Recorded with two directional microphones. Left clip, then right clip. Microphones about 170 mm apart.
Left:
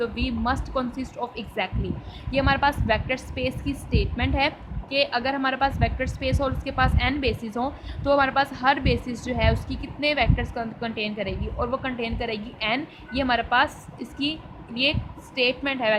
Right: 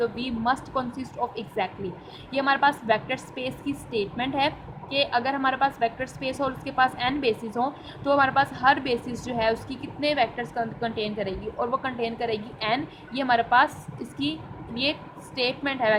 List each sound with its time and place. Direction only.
0.0 s a woman's voice: 20° left (ahead or behind)
15.4 s a woman's voice: 25° left (ahead or behind)